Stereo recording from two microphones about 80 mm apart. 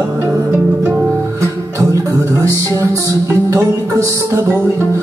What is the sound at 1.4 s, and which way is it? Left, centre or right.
Music, right.